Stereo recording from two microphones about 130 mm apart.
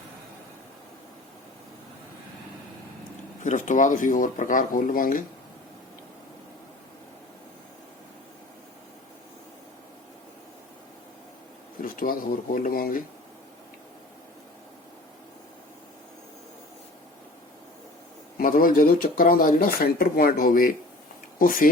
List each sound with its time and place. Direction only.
3.4 s speech: 70° left (ahead or behind); by 5.2 s 90° left
11.8 s speech: 90° left
18.3 s speech: 90° left